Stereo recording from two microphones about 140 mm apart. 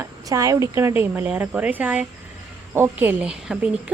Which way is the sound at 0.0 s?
25° right (ahead or behind).